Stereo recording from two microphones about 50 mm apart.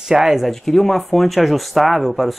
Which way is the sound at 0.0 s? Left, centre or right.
Centre.